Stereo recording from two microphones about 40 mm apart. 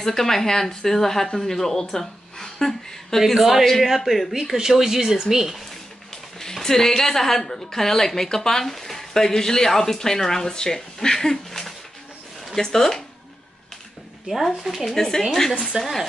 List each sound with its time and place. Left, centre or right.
0.0 s a woman's voice: centre
3.2 s speech: centre
6.4 s a woman's voice: centre
14.2 s speech: centre
15.0 s a woman's voice: centre
15.7 s speech: right